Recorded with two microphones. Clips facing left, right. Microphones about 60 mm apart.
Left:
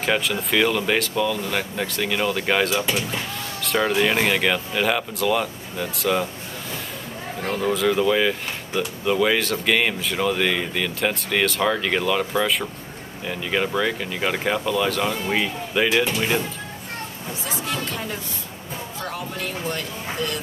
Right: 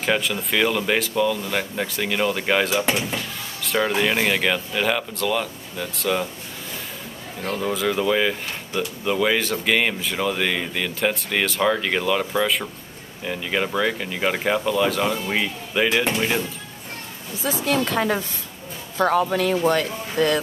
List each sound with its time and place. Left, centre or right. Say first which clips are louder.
0.0 s speech: even; centre
7.5 s speech: left 2 dB; centre
17.5 s speech: right 7 dB; right
17.8 s speech: right 7 dB; right
19.6 s speech: right 8 dB; right